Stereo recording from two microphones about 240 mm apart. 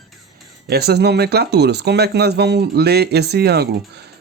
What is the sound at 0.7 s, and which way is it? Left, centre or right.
Speech, right.